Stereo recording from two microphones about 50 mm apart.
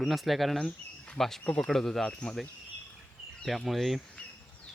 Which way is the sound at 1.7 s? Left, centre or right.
Centre.